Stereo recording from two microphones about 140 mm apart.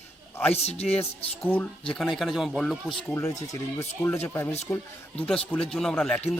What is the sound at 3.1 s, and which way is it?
Speech, 20° left (ahead or behind).